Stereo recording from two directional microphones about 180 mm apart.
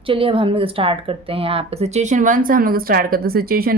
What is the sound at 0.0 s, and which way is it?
Speech, 30° right (ahead or behind).